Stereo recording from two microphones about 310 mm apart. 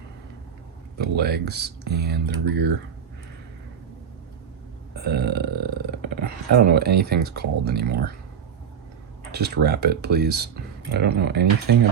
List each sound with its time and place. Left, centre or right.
0.9 s speech: right
4.9 s burping: right
6.2 s speech: right
9.3 s speech: right